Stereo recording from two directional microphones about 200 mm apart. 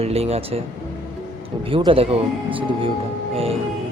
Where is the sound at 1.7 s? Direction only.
25° right (ahead or behind).